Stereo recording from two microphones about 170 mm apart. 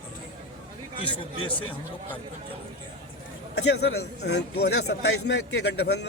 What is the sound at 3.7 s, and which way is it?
A man's voice, 80° left.